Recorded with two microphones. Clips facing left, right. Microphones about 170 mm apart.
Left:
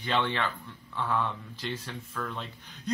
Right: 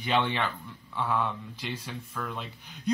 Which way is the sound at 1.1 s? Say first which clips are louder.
Even; 5° right (ahead or behind).